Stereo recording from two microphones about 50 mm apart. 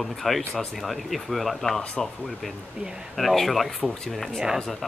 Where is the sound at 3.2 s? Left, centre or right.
Centre.